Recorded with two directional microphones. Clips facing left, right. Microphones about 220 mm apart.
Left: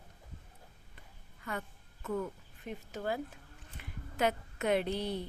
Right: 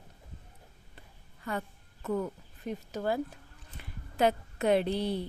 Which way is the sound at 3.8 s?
35° right (ahead or behind).